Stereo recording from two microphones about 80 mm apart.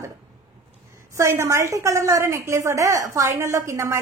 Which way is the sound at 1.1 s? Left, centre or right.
Right.